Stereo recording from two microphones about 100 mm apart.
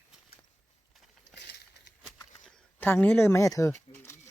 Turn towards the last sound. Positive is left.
turn(degrees=25)  # may be behind; listen again after turning